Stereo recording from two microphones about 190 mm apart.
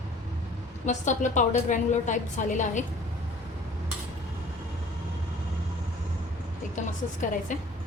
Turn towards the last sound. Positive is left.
turn(degrees=40)  # may be behind; listen again after turning